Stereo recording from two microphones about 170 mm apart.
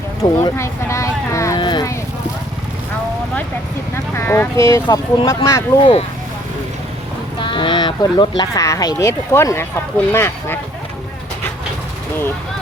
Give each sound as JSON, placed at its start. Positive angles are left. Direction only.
{"t": 0.2, "sound": "a sound", "side_deg": 15}
{"t": 3.9, "sound": "speech", "side_deg": 15}
{"t": 7.4, "sound": "speech", "side_deg": 30}